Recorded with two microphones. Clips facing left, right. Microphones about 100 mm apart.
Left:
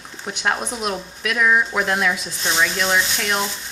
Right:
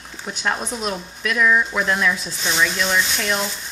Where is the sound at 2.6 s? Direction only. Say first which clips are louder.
Even; 45° left (ahead or behind).